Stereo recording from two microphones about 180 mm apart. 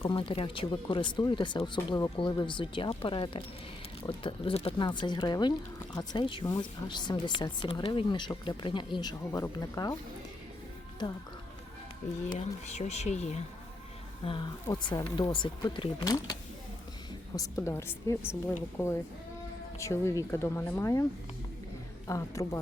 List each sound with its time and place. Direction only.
0.0 s speech: 30° left (ahead or behind)
12.3 s speech: 35° left (ahead or behind)
14.3 s speech: 25° left (ahead or behind)
22.0 s speech: 15° left (ahead or behind)